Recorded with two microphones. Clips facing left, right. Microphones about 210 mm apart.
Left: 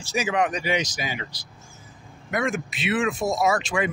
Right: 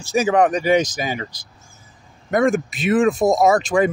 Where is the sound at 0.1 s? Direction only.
50° right (ahead or behind).